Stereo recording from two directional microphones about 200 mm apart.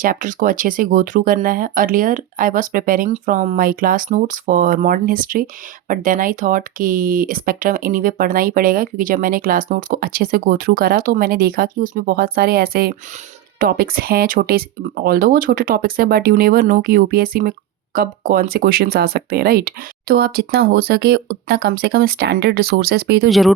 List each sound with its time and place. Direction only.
0.0 s speech: 40° right (ahead or behind)